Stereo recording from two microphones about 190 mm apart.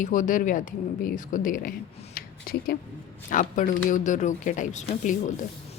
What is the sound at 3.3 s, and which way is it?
Speech, 45° left (ahead or behind).